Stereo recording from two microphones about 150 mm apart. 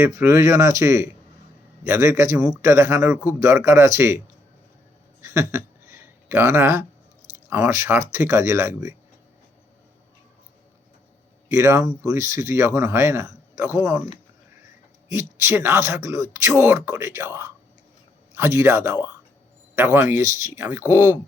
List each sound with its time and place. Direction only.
0.0 s speech: 15° right (ahead or behind)
5.2 s a sound: 20° right (ahead or behind)
7.5 s speech: 20° right (ahead or behind)
11.4 s speech: 20° right (ahead or behind)
15.1 s speech: 20° right (ahead or behind)